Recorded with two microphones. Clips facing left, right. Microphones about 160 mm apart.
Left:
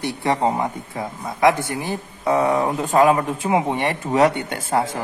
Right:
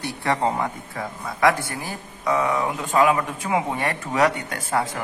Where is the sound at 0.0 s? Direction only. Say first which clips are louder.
Left 3 dB; 20° left (ahead or behind).